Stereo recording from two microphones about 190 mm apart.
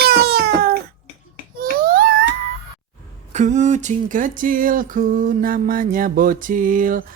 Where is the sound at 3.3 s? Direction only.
40° right (ahead or behind).